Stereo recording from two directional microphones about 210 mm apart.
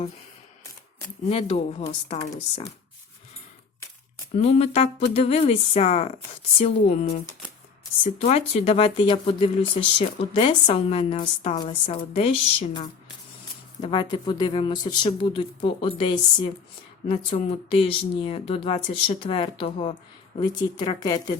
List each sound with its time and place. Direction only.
1.3 s speech: 30° left (ahead or behind)
4.4 s speech: 30° left (ahead or behind)
8.2 s speech: 30° left (ahead or behind)